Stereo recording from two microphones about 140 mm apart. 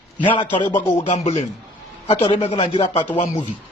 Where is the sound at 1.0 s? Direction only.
50° left (ahead or behind).